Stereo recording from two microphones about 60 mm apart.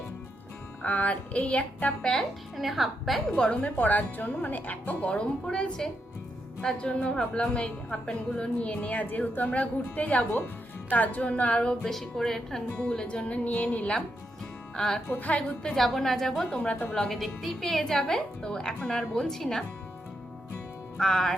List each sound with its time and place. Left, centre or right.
0.8 s a woman's voice: left
2.6 s a woman's voice: centre
3.3 s a woman's voice: centre
10.3 s a woman's voice: left; by 15.0 s centre
15.2 s a woman's voice: left
15.7 s a woman's voice: centre
16.5 s a woman's voice: left
16.9 s a woman's voice: centre
21.0 s a woman's voice: centre